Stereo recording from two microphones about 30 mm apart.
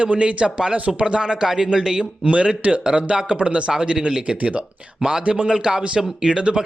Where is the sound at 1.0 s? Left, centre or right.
Right.